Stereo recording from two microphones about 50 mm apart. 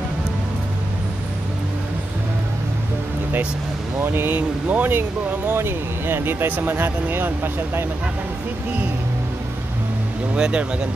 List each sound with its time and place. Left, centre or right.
4.0 s speech: right
4.9 s speech: right
10.4 s speech: right